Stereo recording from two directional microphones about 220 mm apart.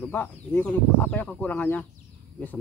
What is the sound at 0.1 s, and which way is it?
Speech, 10° left (ahead or behind).